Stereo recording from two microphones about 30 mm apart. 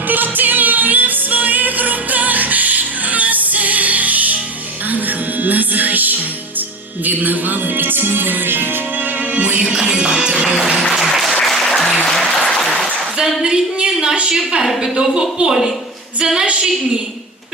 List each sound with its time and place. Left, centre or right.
0.1 s music: right
5.4 s music: right
9.3 s music: right
9.7 s music: right
11.1 s applause: centre
12.6 s applause: centre
13.4 s music: right
14.9 s speech: right